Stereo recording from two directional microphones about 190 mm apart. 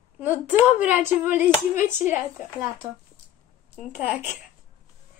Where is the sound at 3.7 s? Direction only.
5° right (ahead or behind).